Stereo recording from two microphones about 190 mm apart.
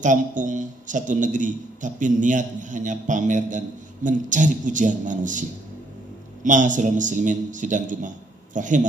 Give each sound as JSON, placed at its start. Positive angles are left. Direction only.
{"t": 0.0, "sound": "a man's voice", "side_deg": -40}
{"t": 6.4, "sound": "a man's voice", "side_deg": -40}